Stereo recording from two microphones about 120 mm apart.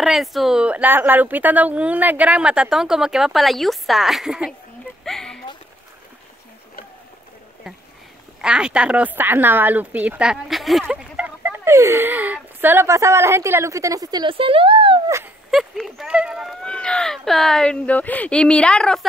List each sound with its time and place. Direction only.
0.0 s speech: centre (ahead or behind)
5.0 s a sound: 5° left (ahead or behind)
8.4 s a woman's voice: 5° right (ahead or behind); by 14.3 s 35° right (ahead or behind)
14.3 s speech: 50° right (ahead or behind)
15.5 s speech: centre (ahead or behind)
16.6 s speech: 10° left (ahead or behind)